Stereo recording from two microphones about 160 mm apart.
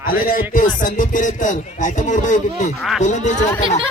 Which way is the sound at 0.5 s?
55° left (ahead or behind).